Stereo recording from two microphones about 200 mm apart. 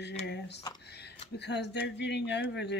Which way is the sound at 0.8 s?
55° left (ahead or behind).